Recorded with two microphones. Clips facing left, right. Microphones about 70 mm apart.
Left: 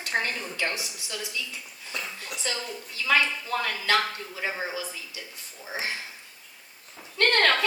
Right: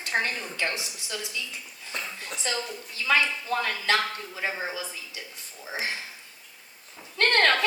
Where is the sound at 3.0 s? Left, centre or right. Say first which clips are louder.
Even; right.